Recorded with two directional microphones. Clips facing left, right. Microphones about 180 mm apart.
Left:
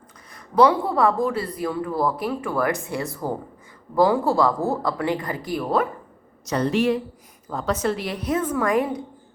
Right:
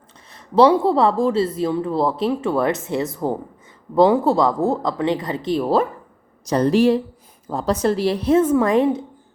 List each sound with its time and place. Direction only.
0.3 s speech: 25° right (ahead or behind)